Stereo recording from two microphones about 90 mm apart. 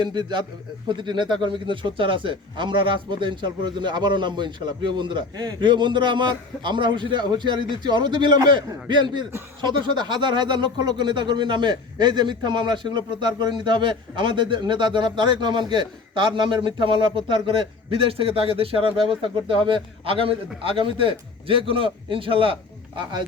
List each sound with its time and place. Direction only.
0.0 s speech: 55° right (ahead or behind); by 20.3 s 85° right
20.6 s a man's voice: 75° right (ahead or behind)